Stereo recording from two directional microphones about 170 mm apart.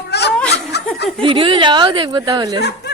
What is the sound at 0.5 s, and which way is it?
Snicker, 80° left.